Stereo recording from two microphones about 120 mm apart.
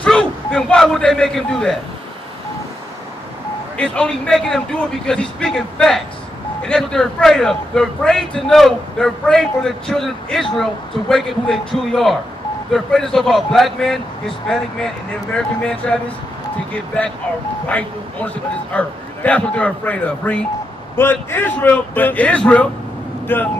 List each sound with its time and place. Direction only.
0.0 s a man's voice: 10° left (ahead or behind)
3.7 s a man's voice: 10° left (ahead or behind)
17.6 s a man's voice: 10° left (ahead or behind)